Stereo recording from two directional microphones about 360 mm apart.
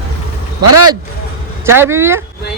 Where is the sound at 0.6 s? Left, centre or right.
Right.